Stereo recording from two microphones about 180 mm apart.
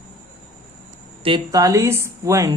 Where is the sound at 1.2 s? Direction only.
25° right (ahead or behind).